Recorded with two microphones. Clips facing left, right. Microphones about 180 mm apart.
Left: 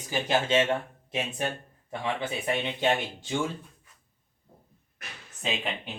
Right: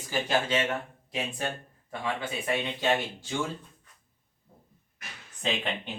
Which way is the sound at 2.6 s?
20° left (ahead or behind).